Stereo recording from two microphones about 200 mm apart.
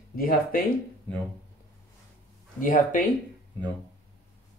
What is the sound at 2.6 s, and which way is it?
Speech, 40° left (ahead or behind).